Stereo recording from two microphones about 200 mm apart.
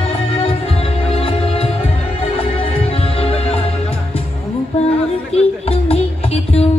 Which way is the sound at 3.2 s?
30° left (ahead or behind).